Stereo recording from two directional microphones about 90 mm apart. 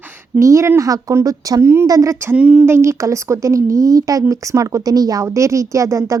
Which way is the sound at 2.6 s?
30° right (ahead or behind).